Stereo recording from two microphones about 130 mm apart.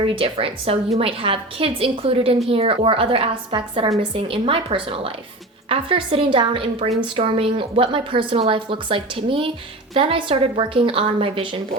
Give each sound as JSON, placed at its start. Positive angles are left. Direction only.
{"t": 0.0, "sound": "a woman's voice", "side_deg": -45}